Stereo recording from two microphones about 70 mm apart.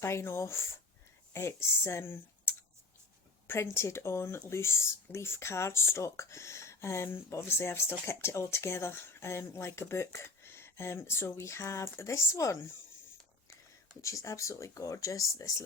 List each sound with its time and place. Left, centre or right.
0.0 s speech: left
14.0 s speech: left